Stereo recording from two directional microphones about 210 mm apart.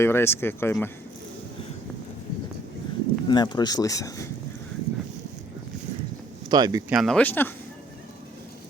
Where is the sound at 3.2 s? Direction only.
20° left (ahead or behind).